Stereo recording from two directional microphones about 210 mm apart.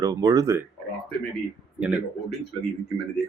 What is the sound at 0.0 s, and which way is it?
Speech, 20° right (ahead or behind).